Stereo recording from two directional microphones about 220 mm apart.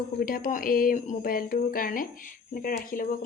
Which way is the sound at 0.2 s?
40° left (ahead or behind).